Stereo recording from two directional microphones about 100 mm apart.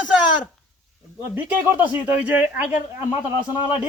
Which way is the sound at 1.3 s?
20° right (ahead or behind).